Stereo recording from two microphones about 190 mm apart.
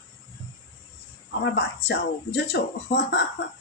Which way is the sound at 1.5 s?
65° left (ahead or behind).